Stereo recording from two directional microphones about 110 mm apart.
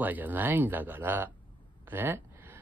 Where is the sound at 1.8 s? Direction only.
20° right (ahead or behind).